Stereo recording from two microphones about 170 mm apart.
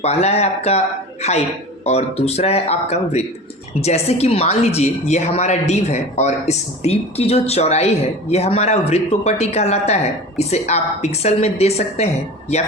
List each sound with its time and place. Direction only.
0.0 s a woman's voice: 40° left (ahead or behind)